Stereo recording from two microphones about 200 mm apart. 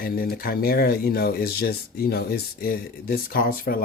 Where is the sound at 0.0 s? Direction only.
45° left (ahead or behind).